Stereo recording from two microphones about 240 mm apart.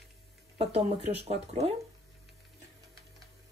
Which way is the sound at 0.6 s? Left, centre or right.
Right.